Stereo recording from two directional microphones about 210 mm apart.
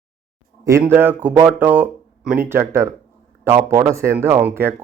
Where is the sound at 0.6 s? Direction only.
10° right (ahead or behind).